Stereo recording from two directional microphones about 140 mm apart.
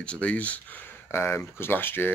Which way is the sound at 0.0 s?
10° left (ahead or behind).